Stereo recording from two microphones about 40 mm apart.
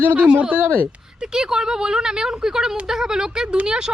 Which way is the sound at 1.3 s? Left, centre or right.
Centre.